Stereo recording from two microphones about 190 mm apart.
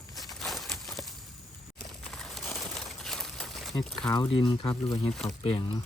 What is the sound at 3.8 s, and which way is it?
Speech, 5° left (ahead or behind).